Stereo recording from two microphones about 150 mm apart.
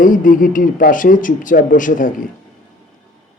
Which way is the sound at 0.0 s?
65° left (ahead or behind).